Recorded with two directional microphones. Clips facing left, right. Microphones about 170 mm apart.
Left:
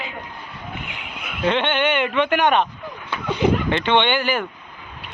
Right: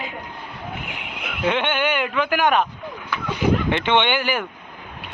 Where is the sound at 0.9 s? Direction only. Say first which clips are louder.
Right 2 dB; 65° right (ahead or behind).